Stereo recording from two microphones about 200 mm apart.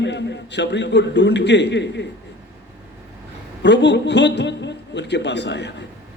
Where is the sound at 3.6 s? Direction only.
60° left (ahead or behind).